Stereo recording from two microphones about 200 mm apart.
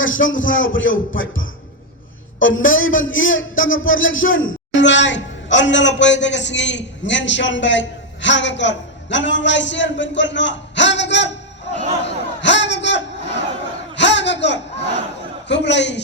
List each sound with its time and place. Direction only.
0.0 s speech: 75° left (ahead or behind)
2.6 s a man's voice: 80° left
12.0 s chatter: 65° left (ahead or behind)
13.9 s a sound: 60° left (ahead or behind)
15.4 s a man's voice: 60° left (ahead or behind)